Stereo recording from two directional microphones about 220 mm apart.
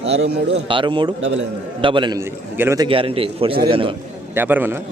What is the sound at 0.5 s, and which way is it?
A man's voice, 20° right (ahead or behind).